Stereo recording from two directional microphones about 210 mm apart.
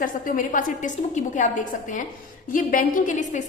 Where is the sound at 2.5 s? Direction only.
40° left (ahead or behind).